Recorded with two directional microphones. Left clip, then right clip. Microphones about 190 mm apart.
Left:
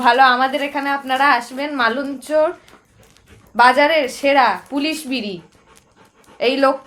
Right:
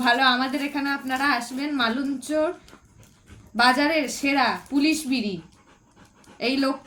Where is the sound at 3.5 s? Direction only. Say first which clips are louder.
Left 8 dB; 10° right (ahead or behind).